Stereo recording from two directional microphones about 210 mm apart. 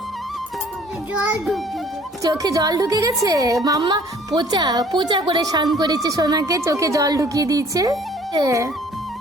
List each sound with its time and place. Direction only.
1.1 s a child's voice: 5° right (ahead or behind)
2.2 s a woman's voice: 15° right (ahead or behind)